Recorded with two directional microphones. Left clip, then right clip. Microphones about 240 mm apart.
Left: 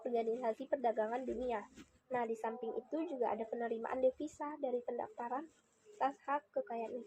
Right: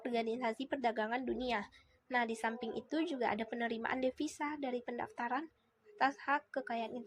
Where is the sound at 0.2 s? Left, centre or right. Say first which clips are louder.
Right 1 dB; right.